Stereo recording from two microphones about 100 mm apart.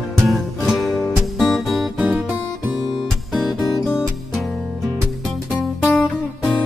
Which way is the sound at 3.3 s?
Centre (ahead or behind).